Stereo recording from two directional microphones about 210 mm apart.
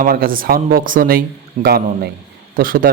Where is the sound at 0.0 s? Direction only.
45° right (ahead or behind).